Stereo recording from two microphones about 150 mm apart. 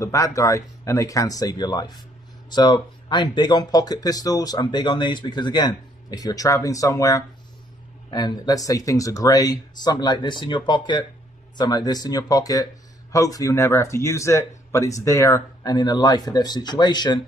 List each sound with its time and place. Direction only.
0.0 s speech: 20° left (ahead or behind)